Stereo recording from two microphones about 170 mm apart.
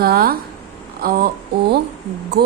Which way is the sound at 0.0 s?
65° right (ahead or behind).